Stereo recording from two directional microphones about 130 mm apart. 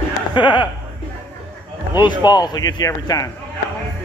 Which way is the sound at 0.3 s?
35° left (ahead or behind).